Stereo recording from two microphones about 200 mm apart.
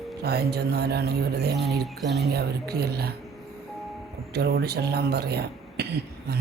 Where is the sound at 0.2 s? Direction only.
55° right (ahead or behind).